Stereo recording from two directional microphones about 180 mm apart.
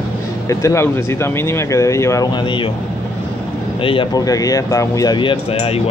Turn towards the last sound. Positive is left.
turn(degrees=35)  # may be behind; listen again after turning